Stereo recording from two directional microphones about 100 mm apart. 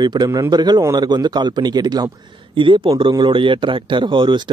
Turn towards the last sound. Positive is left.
turn(degrees=-55)  # may be behind; listen again after turning